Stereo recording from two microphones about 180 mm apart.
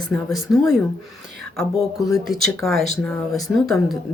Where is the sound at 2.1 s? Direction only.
Centre (ahead or behind).